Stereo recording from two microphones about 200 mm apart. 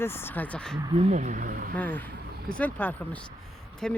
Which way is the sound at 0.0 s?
10° left (ahead or behind).